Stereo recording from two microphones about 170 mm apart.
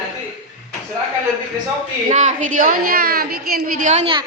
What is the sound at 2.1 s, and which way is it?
A woman's voice, 45° right (ahead or behind).